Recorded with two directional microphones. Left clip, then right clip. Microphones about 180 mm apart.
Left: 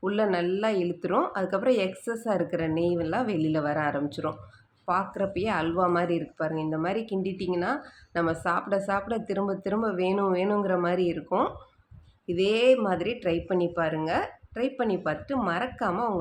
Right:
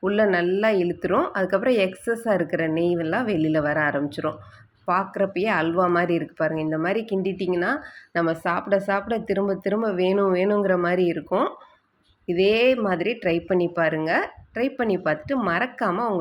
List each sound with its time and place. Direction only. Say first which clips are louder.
0.0 s speech: right 5 dB; 10° right (ahead or behind)